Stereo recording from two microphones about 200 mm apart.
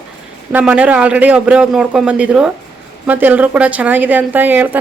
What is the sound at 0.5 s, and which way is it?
A man's voice, 5° right (ahead or behind).